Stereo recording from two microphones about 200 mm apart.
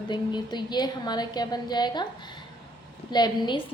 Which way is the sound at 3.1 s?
20° left (ahead or behind).